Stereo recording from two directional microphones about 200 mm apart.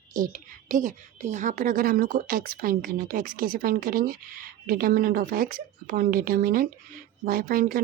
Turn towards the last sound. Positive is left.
turn(degrees=-45)  # may be behind; listen again after turning